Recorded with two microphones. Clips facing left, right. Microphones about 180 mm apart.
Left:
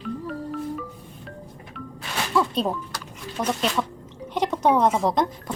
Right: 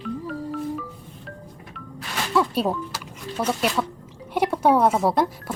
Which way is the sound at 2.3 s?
5° right (ahead or behind).